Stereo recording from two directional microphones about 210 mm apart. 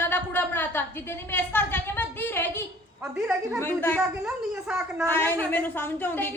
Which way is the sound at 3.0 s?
10° right (ahead or behind).